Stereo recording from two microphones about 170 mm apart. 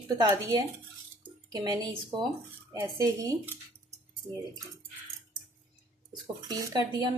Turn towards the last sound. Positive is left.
turn(degrees=-25)  # may be behind; listen again after turning